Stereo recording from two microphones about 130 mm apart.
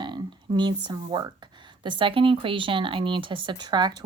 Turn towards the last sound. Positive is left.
turn(degrees=-35)  # may be behind; listen again after turning